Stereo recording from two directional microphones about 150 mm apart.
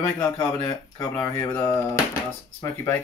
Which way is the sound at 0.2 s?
10° left (ahead or behind).